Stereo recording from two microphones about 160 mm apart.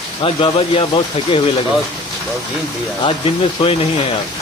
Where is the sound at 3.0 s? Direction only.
35° left (ahead or behind).